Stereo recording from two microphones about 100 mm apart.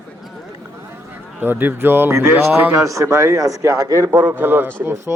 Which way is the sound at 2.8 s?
30° right (ahead or behind).